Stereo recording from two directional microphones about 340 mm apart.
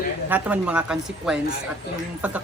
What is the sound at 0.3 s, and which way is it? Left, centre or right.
A woman's voice, centre.